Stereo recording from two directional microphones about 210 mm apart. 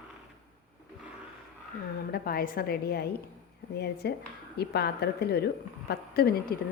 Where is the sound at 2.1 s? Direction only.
45° left (ahead or behind).